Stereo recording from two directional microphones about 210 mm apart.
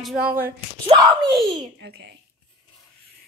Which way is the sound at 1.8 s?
55° right (ahead or behind).